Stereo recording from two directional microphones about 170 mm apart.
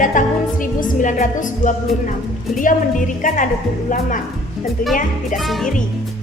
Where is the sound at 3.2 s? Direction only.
50° left (ahead or behind).